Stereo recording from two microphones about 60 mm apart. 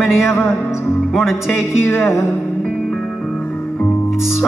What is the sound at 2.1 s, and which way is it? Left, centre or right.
Music, left.